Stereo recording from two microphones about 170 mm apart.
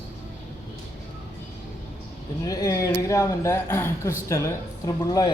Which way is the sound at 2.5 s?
20° left (ahead or behind).